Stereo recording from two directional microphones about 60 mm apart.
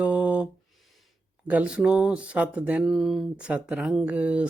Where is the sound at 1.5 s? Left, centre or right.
Right.